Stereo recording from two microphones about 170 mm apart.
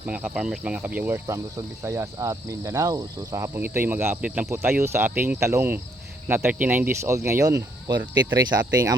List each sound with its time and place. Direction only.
0.0 s speech: 10° right (ahead or behind)